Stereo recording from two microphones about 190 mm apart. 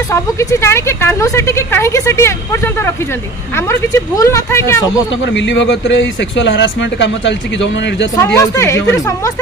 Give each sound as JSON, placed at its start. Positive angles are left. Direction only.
{"t": 0.1, "sound": "speech", "side_deg": 15}
{"t": 5.2, "sound": "speech", "side_deg": 70}
{"t": 8.2, "sound": "speech", "side_deg": 15}